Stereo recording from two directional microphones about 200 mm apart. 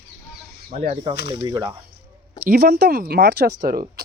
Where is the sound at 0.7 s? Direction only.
30° right (ahead or behind).